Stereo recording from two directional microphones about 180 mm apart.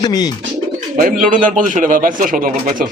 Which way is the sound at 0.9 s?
50° right (ahead or behind).